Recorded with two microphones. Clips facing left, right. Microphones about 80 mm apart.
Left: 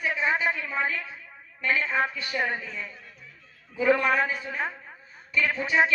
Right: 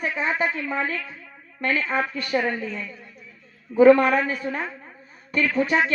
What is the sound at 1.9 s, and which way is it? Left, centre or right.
Speech, right.